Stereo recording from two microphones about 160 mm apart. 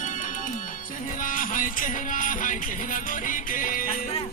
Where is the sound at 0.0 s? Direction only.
55° left (ahead or behind).